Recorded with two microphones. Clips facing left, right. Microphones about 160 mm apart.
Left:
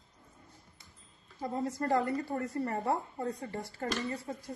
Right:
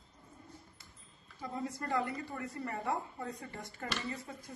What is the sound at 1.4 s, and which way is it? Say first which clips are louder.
A woman's voice: left 6 dB; 40° left (ahead or behind).